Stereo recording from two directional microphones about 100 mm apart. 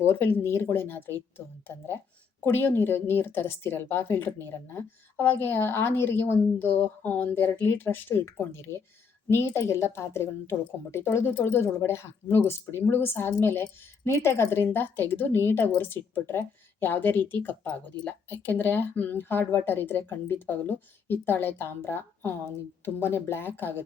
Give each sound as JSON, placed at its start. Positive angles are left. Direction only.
{"t": 0.0, "sound": "speech", "side_deg": 25}
{"t": 2.4, "sound": "speech", "side_deg": 20}